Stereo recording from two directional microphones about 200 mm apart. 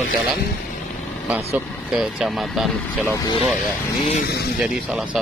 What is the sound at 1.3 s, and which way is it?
Speech, 5° right (ahead or behind).